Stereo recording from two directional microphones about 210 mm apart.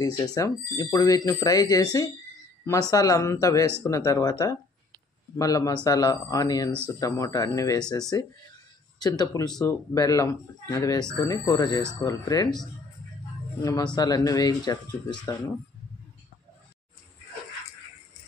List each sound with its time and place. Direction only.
0.0 s speech: 20° left (ahead or behind)
13.9 s speech: 15° left (ahead or behind)